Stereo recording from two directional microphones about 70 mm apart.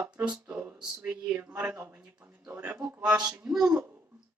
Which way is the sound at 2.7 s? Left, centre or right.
Centre.